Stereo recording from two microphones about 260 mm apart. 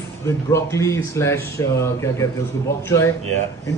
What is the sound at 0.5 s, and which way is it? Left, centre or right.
Speech, centre.